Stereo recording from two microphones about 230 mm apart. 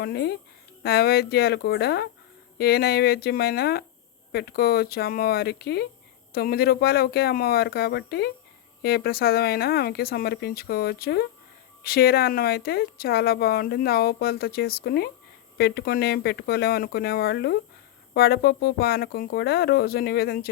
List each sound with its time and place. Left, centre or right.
0.0 s speech: left